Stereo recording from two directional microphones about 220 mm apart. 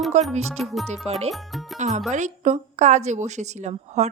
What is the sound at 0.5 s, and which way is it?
Speech, centre (ahead or behind).